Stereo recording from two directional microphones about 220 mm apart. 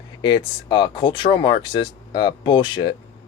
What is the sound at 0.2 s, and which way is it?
Speech, 20° left (ahead or behind).